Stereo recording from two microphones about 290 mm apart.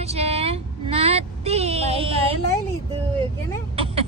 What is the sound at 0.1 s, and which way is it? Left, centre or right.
Child singing, right.